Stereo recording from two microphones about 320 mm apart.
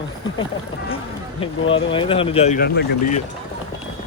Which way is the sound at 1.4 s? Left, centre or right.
Centre.